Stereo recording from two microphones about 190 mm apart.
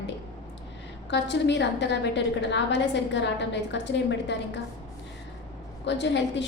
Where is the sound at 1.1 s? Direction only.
65° left (ahead or behind).